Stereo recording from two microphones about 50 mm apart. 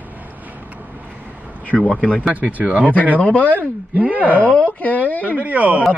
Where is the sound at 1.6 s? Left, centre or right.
Left.